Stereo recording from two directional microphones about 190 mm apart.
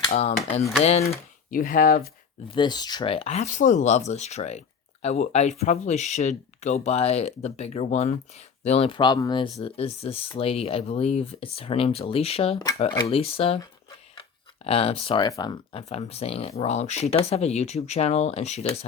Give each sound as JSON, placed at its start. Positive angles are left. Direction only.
{"t": 0.1, "sound": "speech", "side_deg": 35}
{"t": 1.5, "sound": "speech", "side_deg": 45}
{"t": 2.5, "sound": "speech", "side_deg": 25}